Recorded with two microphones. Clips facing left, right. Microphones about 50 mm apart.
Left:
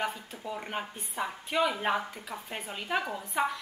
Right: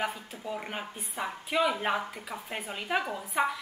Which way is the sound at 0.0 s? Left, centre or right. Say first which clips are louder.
Even; centre.